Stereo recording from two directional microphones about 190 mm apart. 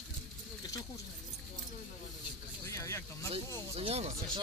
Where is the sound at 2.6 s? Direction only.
15° left (ahead or behind).